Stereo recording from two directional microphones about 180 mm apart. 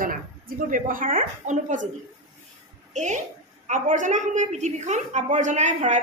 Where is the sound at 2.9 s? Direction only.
40° right (ahead or behind).